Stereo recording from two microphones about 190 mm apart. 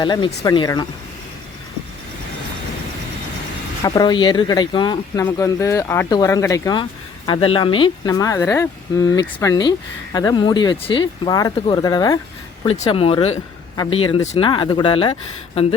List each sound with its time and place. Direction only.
0.0 s speech: 25° left (ahead or behind)
3.8 s speech: 20° left (ahead or behind)
12.6 s speech: 30° left (ahead or behind)